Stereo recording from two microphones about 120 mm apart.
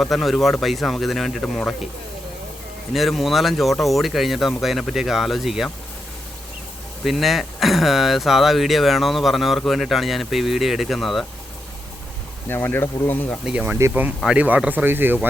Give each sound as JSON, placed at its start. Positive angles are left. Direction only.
{"t": 0.0, "sound": "speech", "side_deg": 0}
{"t": 2.9, "sound": "speech", "side_deg": 0}
{"t": 7.0, "sound": "speech", "side_deg": 0}
{"t": 12.5, "sound": "speech", "side_deg": 20}
{"t": 13.4, "sound": "speech", "side_deg": -10}